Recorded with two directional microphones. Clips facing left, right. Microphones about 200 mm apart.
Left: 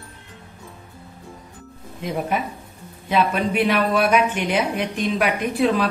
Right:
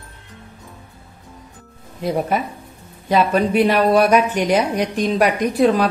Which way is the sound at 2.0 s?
40° right (ahead or behind).